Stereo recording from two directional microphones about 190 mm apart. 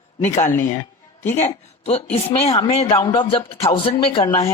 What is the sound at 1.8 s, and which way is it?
Speech, 30° left (ahead or behind).